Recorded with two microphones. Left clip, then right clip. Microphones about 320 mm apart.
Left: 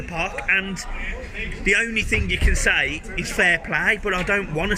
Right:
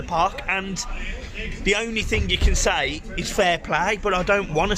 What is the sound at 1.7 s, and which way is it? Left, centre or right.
A man's voice, centre.